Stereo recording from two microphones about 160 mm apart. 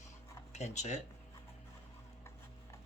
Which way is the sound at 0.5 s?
45° left (ahead or behind).